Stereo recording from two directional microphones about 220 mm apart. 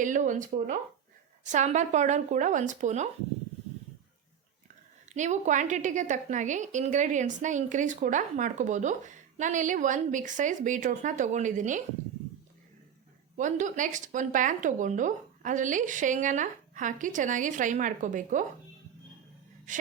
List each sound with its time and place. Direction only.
0.0 s a woman's voice: 35° right (ahead or behind)
5.1 s a woman's voice: 35° right (ahead or behind)
13.3 s a woman's voice: 35° right (ahead or behind)